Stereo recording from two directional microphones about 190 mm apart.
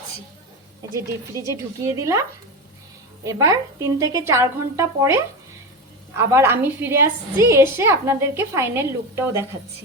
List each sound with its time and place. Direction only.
1.8 s a woman's voice: 15° right (ahead or behind)
3.2 s a woman's voice: 15° right (ahead or behind)